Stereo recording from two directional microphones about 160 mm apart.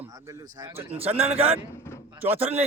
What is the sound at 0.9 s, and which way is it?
Speech, 40° right (ahead or behind).